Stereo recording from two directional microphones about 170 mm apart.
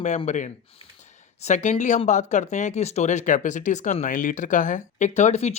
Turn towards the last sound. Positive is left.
turn(degrees=40)  # may be behind; listen again after turning